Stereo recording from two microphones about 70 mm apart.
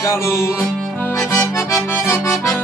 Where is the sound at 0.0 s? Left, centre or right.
Left.